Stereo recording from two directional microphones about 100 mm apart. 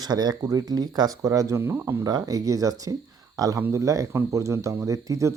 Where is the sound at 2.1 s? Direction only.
40° right (ahead or behind).